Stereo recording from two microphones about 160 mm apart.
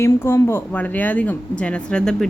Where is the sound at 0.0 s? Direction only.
15° left (ahead or behind).